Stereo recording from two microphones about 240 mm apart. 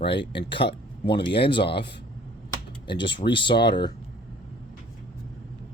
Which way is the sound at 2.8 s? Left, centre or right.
Centre.